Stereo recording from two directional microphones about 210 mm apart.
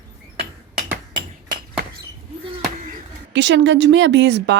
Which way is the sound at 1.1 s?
40° right (ahead or behind).